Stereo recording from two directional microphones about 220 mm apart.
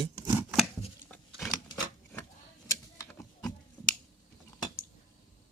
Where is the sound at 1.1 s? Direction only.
Centre (ahead or behind).